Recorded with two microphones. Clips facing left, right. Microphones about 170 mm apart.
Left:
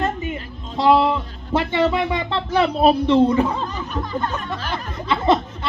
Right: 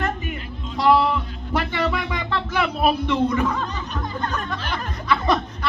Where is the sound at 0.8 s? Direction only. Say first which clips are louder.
Left 2 dB; 20° left (ahead or behind).